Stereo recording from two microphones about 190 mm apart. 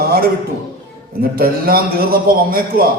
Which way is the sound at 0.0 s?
50° right (ahead or behind).